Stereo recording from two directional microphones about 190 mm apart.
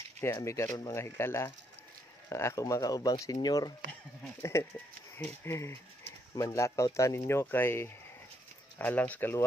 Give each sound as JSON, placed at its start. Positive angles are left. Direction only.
{"t": 0.2, "sound": "speech", "side_deg": 15}